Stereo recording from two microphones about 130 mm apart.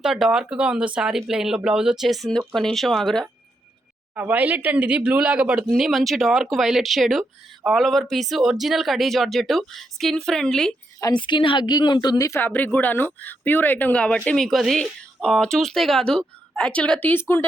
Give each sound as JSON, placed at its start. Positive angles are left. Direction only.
{"t": 0.0, "sound": "speech", "side_deg": -5}
{"t": 4.1, "sound": "speech", "side_deg": -10}
{"t": 11.0, "sound": "a woman's voice", "side_deg": 35}
{"t": 12.4, "sound": "speech", "side_deg": 15}